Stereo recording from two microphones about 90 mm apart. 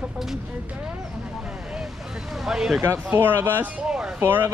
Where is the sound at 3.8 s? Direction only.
5° right (ahead or behind).